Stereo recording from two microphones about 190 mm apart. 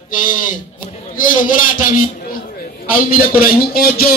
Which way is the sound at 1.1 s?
45° left (ahead or behind).